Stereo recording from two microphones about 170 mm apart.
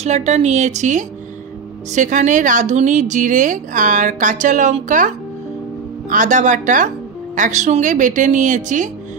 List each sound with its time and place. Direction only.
0.0 s speech: 40° right (ahead or behind)